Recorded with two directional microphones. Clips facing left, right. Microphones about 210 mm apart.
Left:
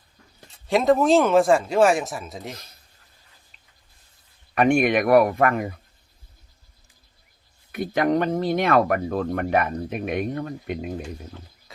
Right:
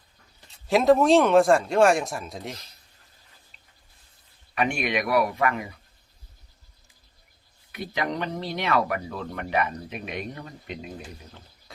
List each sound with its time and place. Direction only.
0.7 s a man's voice: centre (ahead or behind)
4.5 s speech: 50° left (ahead or behind)
7.7 s speech: 50° left (ahead or behind)